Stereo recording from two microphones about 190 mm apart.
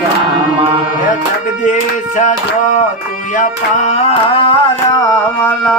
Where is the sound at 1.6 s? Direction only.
40° left (ahead or behind).